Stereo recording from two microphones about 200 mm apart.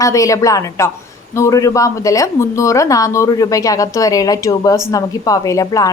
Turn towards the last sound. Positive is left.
turn(degrees=15)  # may be behind; listen again after turning